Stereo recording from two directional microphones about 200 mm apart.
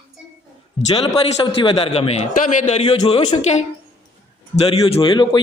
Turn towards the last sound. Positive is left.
turn(degrees=25)  # may be behind; listen again after turning